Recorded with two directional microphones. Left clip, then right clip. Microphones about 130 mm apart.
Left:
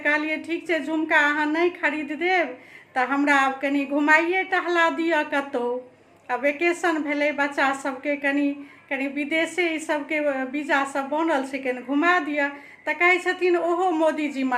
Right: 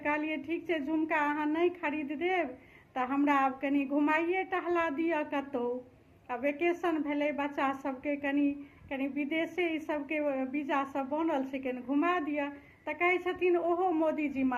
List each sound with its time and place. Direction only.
0.0 s a woman's voice: 30° left (ahead or behind)